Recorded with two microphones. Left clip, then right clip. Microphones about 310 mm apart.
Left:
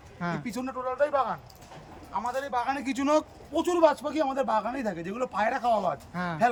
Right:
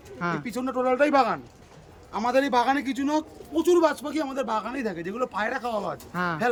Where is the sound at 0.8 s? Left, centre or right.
Right.